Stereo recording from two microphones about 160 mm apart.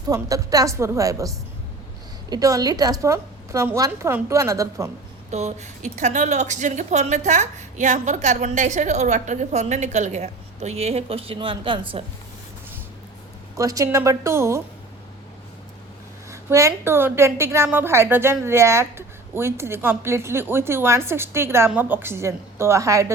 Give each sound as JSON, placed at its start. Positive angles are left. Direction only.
{"t": 0.1, "sound": "a woman's voice", "side_deg": -20}
{"t": 2.3, "sound": "a woman's voice", "side_deg": -20}
{"t": 5.3, "sound": "a woman's voice", "side_deg": -45}
{"t": 13.6, "sound": "a woman's voice", "side_deg": -20}
{"t": 16.3, "sound": "a woman's voice", "side_deg": -20}